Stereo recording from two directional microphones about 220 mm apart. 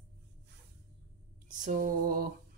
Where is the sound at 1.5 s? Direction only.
35° right (ahead or behind).